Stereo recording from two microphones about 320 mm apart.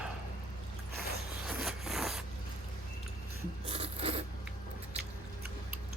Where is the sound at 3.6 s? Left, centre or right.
Centre.